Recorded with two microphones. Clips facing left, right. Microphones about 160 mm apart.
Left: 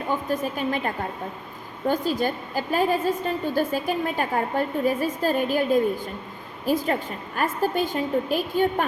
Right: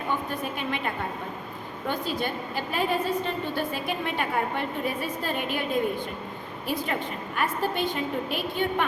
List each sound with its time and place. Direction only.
0.3 s a woman's voice: 40° left (ahead or behind)
1.9 s a woman's voice: 40° left (ahead or behind)